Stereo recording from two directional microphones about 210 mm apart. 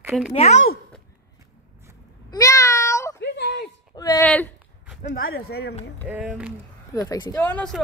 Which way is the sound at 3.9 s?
15° left (ahead or behind).